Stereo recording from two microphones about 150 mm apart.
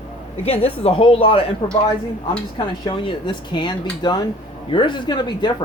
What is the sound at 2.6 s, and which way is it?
Speech, 35° left (ahead or behind).